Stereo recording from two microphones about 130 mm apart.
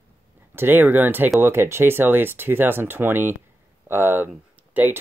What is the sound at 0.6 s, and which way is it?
Speech, 15° right (ahead or behind).